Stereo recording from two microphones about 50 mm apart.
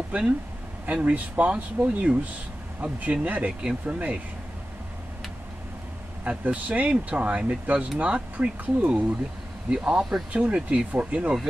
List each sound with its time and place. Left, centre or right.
0.1 s speech: right
6.2 s speech: right
9.8 s speech: centre
10.3 s speech: right